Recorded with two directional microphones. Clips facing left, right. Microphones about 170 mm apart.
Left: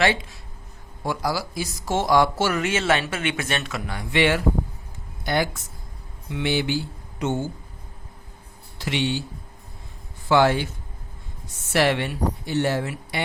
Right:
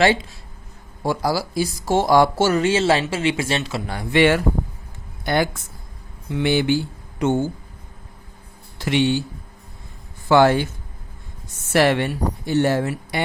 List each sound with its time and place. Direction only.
0.0 s a woman's voice: 30° right (ahead or behind); by 6.7 s 55° right (ahead or behind)
8.8 s speech: 50° right (ahead or behind)
10.2 s a woman's voice: 50° right (ahead or behind)
11.7 s a woman's voice: 50° right (ahead or behind)